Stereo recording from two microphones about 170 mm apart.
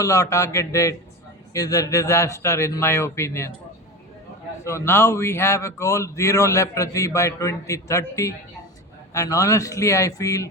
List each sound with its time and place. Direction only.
0.0 s speech: 15° left (ahead or behind)
4.6 s speech: 15° left (ahead or behind)